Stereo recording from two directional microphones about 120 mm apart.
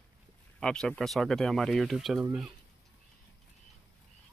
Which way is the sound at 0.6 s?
5° left (ahead or behind).